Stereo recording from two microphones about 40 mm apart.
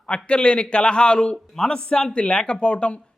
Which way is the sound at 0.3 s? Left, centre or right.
Left.